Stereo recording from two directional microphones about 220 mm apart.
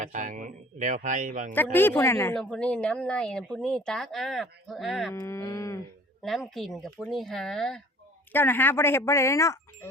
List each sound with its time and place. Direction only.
0.0 s speech: 35° right (ahead or behind)
1.5 s a woman's voice: 10° left (ahead or behind)
5.1 s speech: 10° left (ahead or behind)
6.2 s a woman's voice: centre (ahead or behind)